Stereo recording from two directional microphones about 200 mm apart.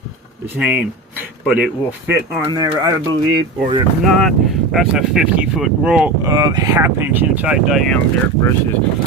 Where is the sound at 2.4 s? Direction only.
20° right (ahead or behind).